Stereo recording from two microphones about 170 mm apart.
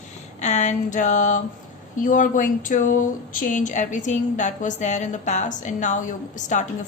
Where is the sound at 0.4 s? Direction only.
45° left (ahead or behind).